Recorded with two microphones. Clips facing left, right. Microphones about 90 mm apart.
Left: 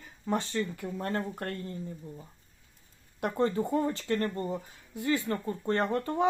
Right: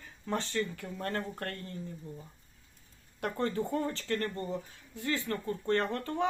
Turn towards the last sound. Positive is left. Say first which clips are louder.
# left 2 dB
turn(degrees=20)  # may be behind; listen again after turning